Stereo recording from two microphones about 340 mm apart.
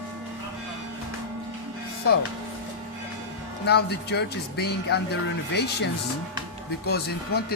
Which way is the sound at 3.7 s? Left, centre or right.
Left.